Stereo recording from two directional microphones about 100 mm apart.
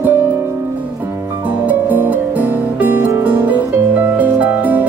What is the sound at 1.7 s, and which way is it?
Music, 15° right (ahead or behind).